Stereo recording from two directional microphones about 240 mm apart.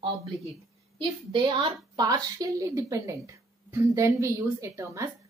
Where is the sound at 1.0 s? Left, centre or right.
Right.